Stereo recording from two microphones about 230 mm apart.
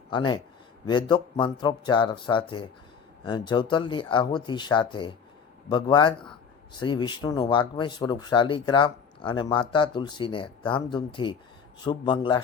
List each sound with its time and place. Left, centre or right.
0.1 s speech: left